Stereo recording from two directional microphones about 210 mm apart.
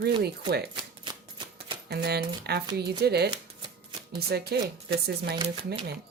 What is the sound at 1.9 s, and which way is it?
A woman's voice, 50° right (ahead or behind).